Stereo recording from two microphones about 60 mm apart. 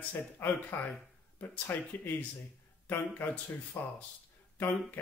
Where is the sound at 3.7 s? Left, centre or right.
Left.